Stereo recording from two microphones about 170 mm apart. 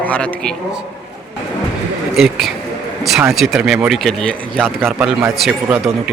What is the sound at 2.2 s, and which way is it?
Speech, centre (ahead or behind).